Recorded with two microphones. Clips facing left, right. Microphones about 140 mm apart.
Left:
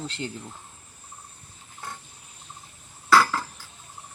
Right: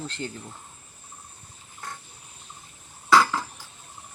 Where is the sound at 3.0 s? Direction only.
15° right (ahead or behind).